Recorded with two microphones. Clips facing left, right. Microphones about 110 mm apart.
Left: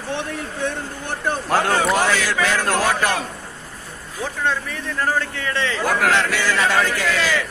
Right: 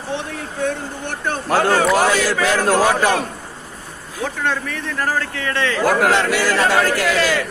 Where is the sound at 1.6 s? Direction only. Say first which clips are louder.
Right 5 dB; centre (ahead or behind).